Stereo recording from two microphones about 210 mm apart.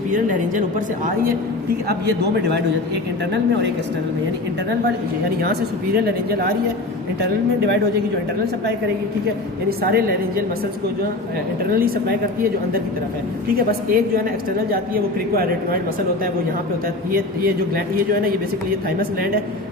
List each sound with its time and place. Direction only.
5.4 s a man's voice: 50° right (ahead or behind)
9.6 s a man's voice: 45° right (ahead or behind)
11.7 s a man's voice: 45° right (ahead or behind)
13.5 s a man's voice: 45° right (ahead or behind)
17.1 s a man's voice: 45° right (ahead or behind)